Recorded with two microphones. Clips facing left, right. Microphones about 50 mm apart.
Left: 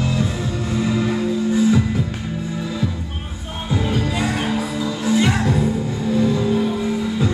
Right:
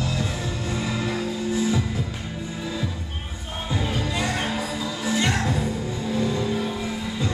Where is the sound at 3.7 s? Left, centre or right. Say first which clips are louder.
Left 5 dB; centre.